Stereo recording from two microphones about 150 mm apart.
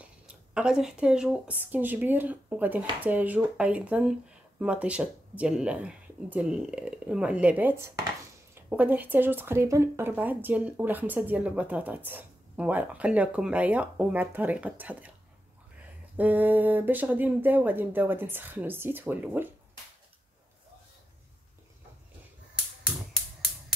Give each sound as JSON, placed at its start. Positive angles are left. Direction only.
{"t": 0.6, "sound": "speech", "side_deg": -5}
{"t": 16.2, "sound": "speech", "side_deg": -10}